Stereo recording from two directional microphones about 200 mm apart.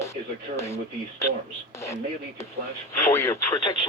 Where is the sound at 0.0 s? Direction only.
15° left (ahead or behind).